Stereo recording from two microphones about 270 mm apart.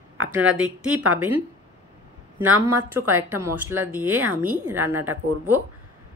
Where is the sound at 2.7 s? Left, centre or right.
Centre.